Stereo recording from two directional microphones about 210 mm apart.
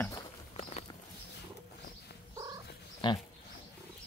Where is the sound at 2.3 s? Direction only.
15° right (ahead or behind).